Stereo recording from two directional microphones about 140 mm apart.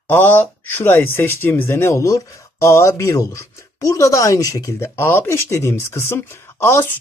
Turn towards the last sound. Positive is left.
turn(degrees=20)  # may be behind; listen again after turning